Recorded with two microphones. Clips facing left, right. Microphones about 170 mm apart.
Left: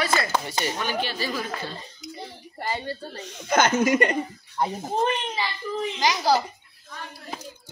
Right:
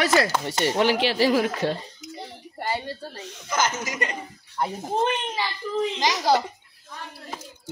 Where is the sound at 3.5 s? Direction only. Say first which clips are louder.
Left 7 dB; 60° left (ahead or behind).